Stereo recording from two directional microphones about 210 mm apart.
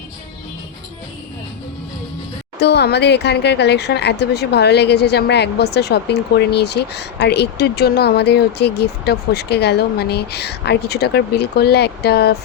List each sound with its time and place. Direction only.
2.6 s speech: 50° left (ahead or behind)